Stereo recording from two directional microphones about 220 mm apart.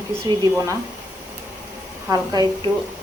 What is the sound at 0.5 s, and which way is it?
Speech, 15° right (ahead or behind).